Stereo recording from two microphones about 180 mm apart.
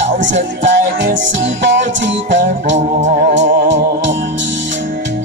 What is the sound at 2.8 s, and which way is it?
Music, 40° right (ahead or behind).